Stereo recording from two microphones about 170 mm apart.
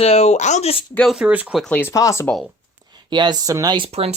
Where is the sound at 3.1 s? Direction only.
25° right (ahead or behind).